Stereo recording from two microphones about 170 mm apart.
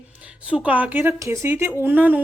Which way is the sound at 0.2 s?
5° right (ahead or behind).